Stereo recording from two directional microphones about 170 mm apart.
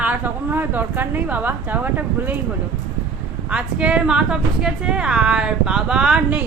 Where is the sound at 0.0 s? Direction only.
10° right (ahead or behind).